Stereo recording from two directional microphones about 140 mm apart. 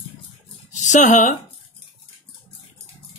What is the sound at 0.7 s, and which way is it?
Speech, 60° left (ahead or behind).